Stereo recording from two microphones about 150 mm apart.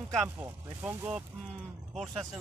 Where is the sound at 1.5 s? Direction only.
Centre (ahead or behind).